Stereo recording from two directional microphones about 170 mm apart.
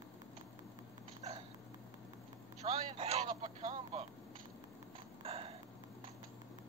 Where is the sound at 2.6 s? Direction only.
40° right (ahead or behind).